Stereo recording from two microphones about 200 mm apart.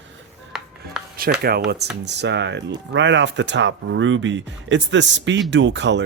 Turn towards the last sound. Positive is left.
turn(degrees=-60)  # may be behind; listen again after turning